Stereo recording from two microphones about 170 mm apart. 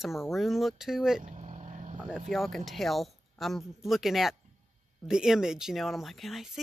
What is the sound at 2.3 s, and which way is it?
Speech, centre (ahead or behind).